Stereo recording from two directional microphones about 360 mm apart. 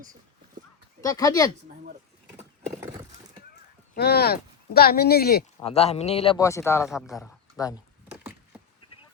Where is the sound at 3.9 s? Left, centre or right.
Left; by 7.7 s centre.